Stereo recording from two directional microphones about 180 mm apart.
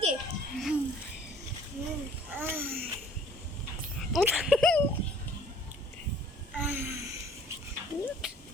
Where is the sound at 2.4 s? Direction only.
10° right (ahead or behind).